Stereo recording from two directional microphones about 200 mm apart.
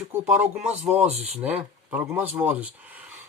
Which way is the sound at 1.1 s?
35° right (ahead or behind).